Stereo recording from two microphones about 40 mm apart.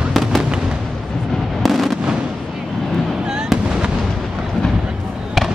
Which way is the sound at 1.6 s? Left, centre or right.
Centre.